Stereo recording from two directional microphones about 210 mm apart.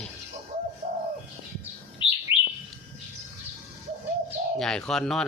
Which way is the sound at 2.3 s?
25° left (ahead or behind).